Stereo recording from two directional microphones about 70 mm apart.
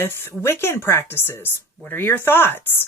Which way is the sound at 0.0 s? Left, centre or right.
Left.